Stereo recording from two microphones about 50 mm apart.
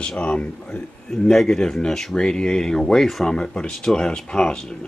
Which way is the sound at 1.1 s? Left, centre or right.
Centre.